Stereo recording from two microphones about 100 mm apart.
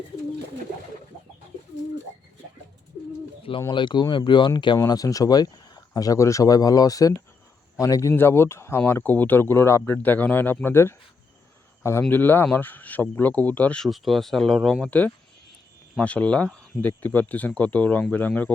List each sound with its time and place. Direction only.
3.7 s speech: 50° left (ahead or behind)
4.9 s speech: 35° left (ahead or behind)
8.1 s speech: 25° left (ahead or behind)
13.8 s speech: centre (ahead or behind)